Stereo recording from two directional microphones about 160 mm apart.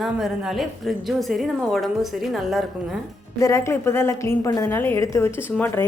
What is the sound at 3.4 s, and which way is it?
A woman's voice, 20° left (ahead or behind).